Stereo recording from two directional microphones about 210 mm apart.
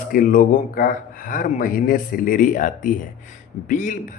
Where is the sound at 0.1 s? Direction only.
40° left (ahead or behind).